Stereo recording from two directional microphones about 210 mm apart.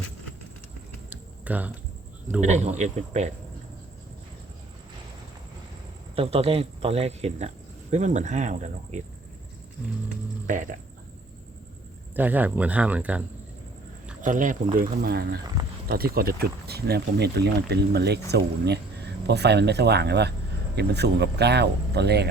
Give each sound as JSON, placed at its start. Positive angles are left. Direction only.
{"t": 1.1, "sound": "typing", "side_deg": -5}
{"t": 2.4, "sound": "speech", "side_deg": -35}
{"t": 6.1, "sound": "speech", "side_deg": -30}
{"t": 10.4, "sound": "speech", "side_deg": -40}
{"t": 12.1, "sound": "speech", "side_deg": -10}
{"t": 14.2, "sound": "speech", "side_deg": -40}